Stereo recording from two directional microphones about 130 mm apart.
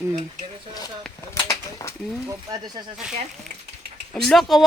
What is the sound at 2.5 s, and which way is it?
Speech, 30° right (ahead or behind).